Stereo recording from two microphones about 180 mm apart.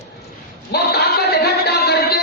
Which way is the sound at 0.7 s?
65° left (ahead or behind).